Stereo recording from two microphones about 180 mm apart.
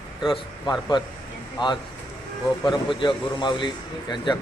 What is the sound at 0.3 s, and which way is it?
A man's voice, 25° left (ahead or behind).